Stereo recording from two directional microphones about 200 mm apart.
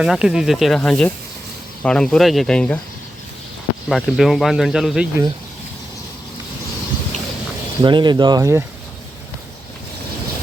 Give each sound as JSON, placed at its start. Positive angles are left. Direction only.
{"t": 0.0, "sound": "speech", "side_deg": -5}
{"t": 3.8, "sound": "speech", "side_deg": 0}
{"t": 7.8, "sound": "speech", "side_deg": -20}